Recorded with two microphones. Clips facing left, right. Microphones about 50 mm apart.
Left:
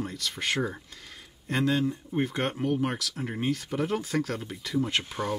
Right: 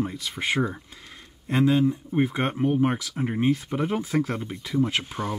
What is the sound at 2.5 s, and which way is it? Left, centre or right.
Speech, right.